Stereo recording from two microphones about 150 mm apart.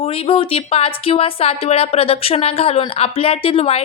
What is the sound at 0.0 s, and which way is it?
A woman's voice, 40° left (ahead or behind).